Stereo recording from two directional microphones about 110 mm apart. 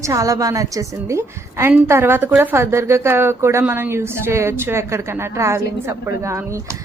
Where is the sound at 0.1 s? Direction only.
30° right (ahead or behind).